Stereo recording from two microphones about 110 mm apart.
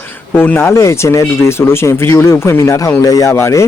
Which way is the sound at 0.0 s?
15° left (ahead or behind).